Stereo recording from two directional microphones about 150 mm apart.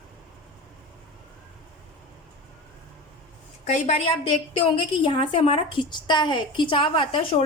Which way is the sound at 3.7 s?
45° left (ahead or behind).